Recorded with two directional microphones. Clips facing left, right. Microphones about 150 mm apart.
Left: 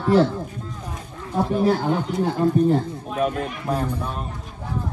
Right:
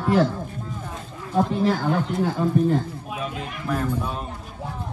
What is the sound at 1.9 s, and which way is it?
Speech, centre (ahead or behind).